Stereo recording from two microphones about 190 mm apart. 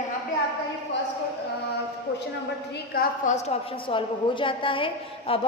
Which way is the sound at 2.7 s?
45° left (ahead or behind).